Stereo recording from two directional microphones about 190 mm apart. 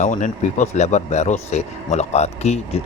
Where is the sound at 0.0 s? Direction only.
40° left (ahead or behind).